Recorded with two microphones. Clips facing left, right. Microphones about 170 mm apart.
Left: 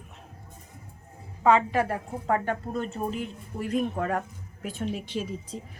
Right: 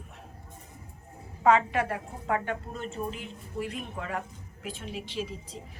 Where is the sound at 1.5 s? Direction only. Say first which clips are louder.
Left 2 dB; 35° left (ahead or behind).